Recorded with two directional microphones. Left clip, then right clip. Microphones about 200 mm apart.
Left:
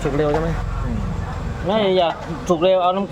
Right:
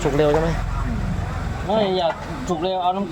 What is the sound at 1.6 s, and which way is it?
Speech, 50° left (ahead or behind).